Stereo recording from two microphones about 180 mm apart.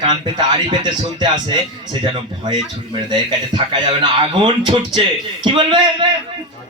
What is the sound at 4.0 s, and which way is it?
Speech, 25° right (ahead or behind).